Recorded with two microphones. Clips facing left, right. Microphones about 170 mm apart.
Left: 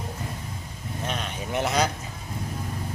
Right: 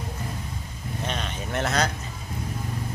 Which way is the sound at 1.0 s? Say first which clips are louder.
Even; 5° left (ahead or behind).